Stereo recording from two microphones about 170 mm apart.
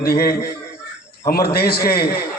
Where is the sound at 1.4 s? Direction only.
65° left (ahead or behind).